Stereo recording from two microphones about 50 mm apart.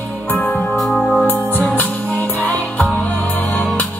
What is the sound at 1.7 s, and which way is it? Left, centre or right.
Music, left.